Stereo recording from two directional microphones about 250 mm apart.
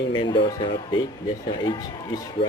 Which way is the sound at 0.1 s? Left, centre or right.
Centre.